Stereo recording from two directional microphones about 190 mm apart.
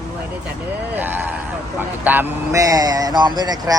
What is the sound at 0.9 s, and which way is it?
Speech, 10° right (ahead or behind).